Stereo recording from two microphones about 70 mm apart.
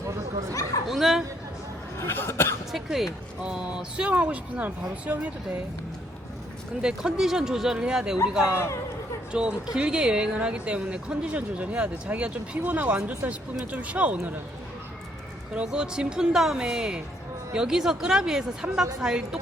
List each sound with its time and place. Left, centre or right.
0.9 s speech: centre
2.0 s cough: left
2.7 s speech: centre
3.4 s a woman's voice: centre
6.8 s a woman's voice: centre
8.5 s speech: left
9.3 s a woman's voice: centre
15.5 s a woman's voice: centre